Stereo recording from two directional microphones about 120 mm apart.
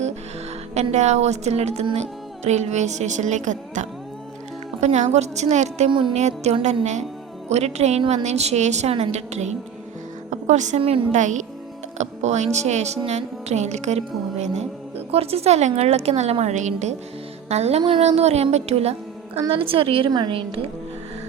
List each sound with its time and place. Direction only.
0.7 s a woman's voice: 70° right (ahead or behind); by 3.8 s 90° right
4.8 s a woman's voice: 70° right (ahead or behind)
5.9 s a woman's voice: 45° right (ahead or behind)
6.1 s a woman's voice: 70° right (ahead or behind)
10.2 s music: 85° right
10.8 s a woman's voice: 50° right (ahead or behind)
11.1 s speech: 90° right
11.9 s a woman's voice: 70° right (ahead or behind)
17.5 s a woman's voice: 60° right (ahead or behind)
19.5 s a woman's voice: 50° right (ahead or behind)